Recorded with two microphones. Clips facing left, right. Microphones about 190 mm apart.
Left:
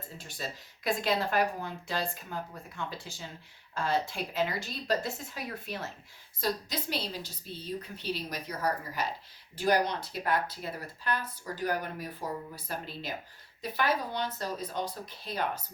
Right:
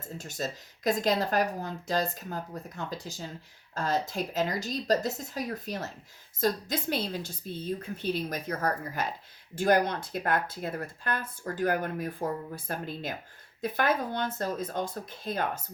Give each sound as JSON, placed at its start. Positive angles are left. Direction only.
{"t": 0.2, "sound": "speech", "side_deg": -45}